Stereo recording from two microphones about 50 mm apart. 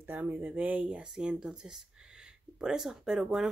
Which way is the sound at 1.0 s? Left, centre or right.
Centre.